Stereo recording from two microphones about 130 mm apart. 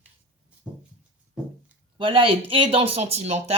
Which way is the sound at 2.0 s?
45° right (ahead or behind).